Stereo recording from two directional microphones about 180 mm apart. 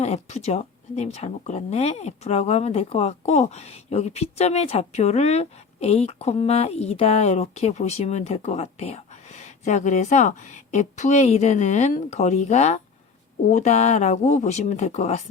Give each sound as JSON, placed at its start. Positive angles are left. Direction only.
{"t": 0.0, "sound": "speech", "side_deg": 35}